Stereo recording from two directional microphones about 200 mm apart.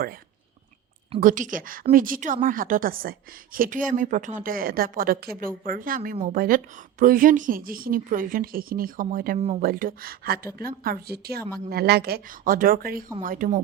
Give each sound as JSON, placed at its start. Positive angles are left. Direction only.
{"t": 1.2, "sound": "a woman's voice", "side_deg": -40}